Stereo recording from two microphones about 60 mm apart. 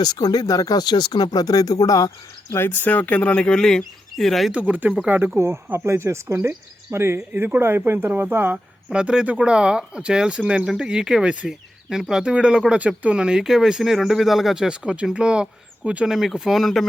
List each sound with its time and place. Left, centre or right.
0.0 s speech: left
2.6 s speech: left
2.9 s speech: left; by 4.5 s centre
4.5 s speech: right
5.3 s speech: right
8.9 s speech: centre